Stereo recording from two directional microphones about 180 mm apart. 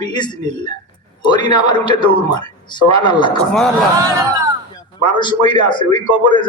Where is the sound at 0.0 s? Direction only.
25° left (ahead or behind).